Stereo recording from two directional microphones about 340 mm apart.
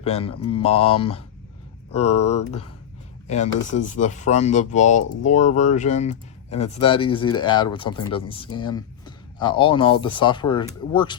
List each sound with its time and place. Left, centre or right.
0.0 s speech: centre
2.0 s speech: left
3.2 s speech: centre